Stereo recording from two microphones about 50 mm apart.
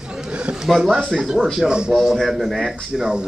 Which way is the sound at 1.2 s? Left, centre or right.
Centre.